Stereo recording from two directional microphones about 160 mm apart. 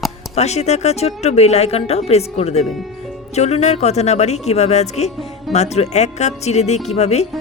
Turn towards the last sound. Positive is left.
turn(degrees=40)  # may be behind; listen again after turning